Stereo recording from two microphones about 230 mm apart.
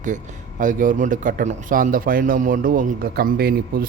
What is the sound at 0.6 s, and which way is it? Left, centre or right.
A man's voice, right.